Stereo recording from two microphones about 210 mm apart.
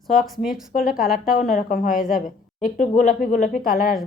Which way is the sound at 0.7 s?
40° left (ahead or behind).